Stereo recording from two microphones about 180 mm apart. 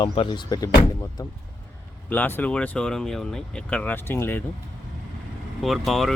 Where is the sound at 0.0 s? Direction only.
25° left (ahead or behind).